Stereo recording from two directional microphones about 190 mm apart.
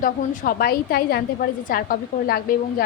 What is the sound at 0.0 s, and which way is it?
A woman's voice, 50° left (ahead or behind).